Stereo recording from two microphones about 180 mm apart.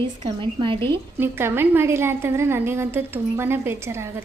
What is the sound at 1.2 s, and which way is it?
A woman's voice, 15° right (ahead or behind).